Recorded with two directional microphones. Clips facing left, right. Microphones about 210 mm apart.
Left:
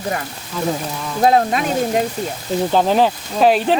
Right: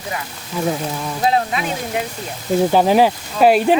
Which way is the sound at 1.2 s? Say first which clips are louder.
Left 4 dB; 45° left (ahead or behind).